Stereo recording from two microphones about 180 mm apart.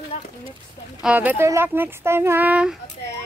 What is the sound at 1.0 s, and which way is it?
Speech, 10° right (ahead or behind).